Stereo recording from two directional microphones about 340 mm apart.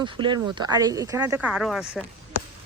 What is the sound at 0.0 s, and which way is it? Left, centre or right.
Speech, centre.